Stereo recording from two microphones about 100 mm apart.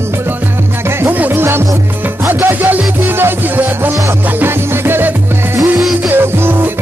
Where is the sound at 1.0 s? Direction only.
20° right (ahead or behind).